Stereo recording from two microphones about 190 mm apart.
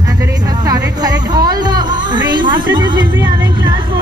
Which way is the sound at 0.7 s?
20° right (ahead or behind).